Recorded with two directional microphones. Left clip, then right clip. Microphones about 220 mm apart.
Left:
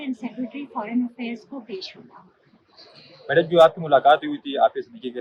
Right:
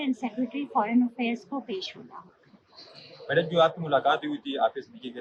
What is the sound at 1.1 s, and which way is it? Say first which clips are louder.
Speech: right 3 dB; 5° right (ahead or behind).